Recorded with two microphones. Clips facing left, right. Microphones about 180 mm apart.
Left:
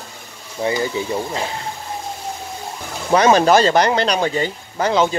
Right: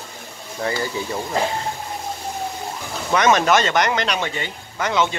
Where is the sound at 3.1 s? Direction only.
30° left (ahead or behind).